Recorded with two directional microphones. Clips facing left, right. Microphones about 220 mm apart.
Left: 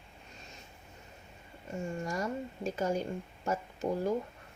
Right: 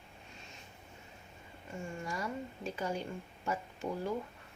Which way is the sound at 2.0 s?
45° left (ahead or behind).